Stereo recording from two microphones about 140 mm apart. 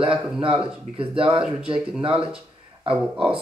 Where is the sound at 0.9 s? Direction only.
40° right (ahead or behind).